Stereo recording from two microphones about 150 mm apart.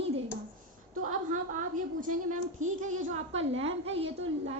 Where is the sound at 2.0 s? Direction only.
60° right (ahead or behind); by 4.5 s 40° right (ahead or behind).